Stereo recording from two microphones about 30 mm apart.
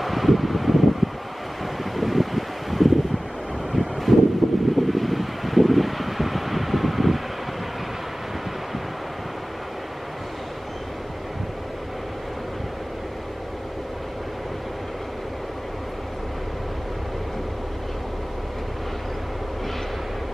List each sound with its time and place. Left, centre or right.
0.0 s a sound: centre
2.0 s wind: centre
3.7 s vehicle: centre
4.4 s vehicle: centre